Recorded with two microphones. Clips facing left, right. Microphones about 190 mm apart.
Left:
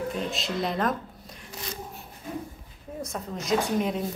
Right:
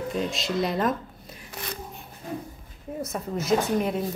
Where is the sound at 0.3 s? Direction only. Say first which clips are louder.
Right 3 dB; centre (ahead or behind).